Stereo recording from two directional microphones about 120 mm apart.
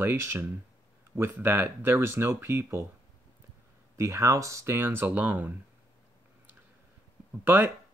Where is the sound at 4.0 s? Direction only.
25° right (ahead or behind).